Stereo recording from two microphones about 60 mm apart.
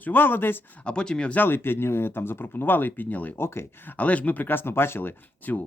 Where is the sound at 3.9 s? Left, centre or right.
Left.